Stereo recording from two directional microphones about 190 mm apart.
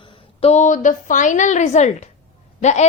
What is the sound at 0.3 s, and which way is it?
A woman's voice, 35° left (ahead or behind).